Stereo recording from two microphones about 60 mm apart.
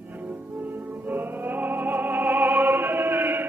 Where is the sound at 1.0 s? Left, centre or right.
Right.